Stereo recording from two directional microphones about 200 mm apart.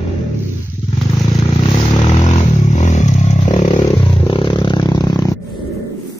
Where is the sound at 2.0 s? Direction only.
35° left (ahead or behind).